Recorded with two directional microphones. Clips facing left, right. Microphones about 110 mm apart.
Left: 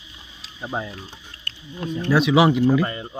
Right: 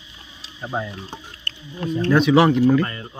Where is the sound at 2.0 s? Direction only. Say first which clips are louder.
Right 2 dB; 5° left (ahead or behind).